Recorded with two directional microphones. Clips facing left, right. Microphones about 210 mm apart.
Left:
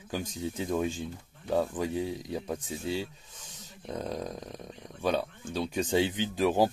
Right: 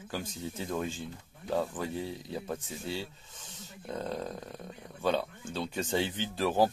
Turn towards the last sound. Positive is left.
turn(degrees=15)  # may be behind; listen again after turning